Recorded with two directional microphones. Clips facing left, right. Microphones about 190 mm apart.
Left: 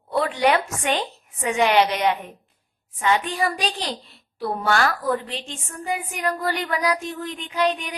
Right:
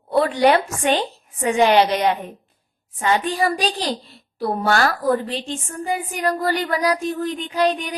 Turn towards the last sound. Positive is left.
turn(degrees=-35)  # may be behind; listen again after turning